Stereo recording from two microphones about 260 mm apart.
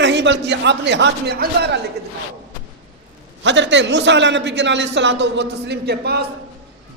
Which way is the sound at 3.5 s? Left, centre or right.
Right.